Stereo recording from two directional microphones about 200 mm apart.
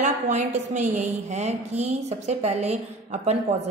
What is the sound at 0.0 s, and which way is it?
A woman's voice, 35° right (ahead or behind).